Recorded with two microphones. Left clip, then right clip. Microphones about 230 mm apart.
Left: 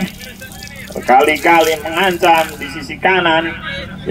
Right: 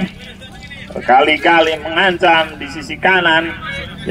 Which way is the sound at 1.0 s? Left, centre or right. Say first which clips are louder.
Even; right.